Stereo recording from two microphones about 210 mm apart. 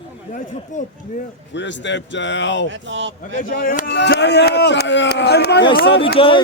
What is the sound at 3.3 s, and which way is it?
A man's voice, 40° left (ahead or behind).